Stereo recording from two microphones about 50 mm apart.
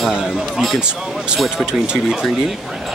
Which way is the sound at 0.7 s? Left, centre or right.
Centre.